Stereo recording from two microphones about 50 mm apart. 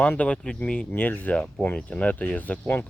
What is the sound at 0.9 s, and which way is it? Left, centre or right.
Speech, left.